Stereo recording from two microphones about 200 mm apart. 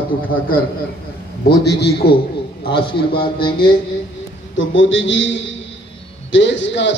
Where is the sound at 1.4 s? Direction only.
55° left (ahead or behind).